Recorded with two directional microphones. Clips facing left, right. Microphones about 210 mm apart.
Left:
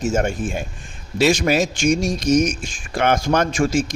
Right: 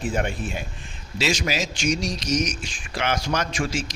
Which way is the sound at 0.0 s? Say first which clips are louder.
Left 6 dB; 45° left (ahead or behind).